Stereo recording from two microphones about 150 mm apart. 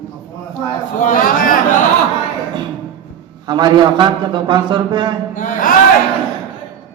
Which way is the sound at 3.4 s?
30° right (ahead or behind).